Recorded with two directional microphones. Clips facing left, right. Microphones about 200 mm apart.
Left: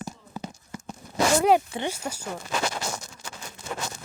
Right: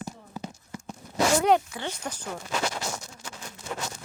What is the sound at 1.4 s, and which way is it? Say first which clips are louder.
Speech: left 2 dB; 5° left (ahead or behind).